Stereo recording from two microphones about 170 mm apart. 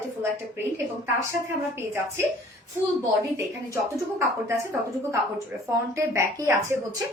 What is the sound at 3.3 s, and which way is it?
Speech, 15° right (ahead or behind).